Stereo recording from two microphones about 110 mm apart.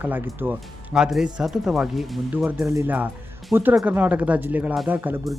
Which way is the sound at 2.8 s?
15° right (ahead or behind).